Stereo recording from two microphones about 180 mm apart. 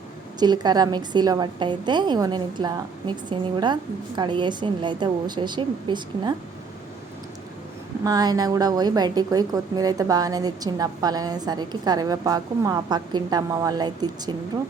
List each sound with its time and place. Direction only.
0.3 s a woman's voice: 25° right (ahead or behind)
8.0 s a woman's voice: 20° right (ahead or behind)